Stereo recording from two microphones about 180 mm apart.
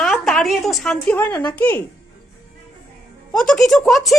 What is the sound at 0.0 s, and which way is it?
A woman's voice, centre (ahead or behind).